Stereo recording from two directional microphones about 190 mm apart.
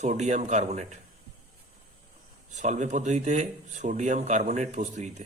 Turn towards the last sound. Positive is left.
turn(degrees=-40)  # may be behind; listen again after turning